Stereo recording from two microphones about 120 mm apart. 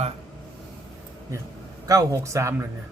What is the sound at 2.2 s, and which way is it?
Speech, 25° right (ahead or behind).